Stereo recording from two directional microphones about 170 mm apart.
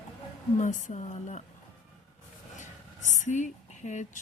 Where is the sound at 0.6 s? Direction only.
50° left (ahead or behind).